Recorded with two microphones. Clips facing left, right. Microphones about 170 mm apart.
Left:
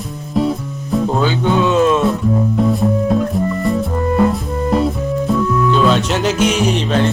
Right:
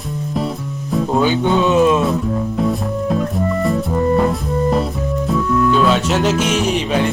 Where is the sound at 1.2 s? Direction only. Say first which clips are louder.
Right 3 dB; 15° right (ahead or behind).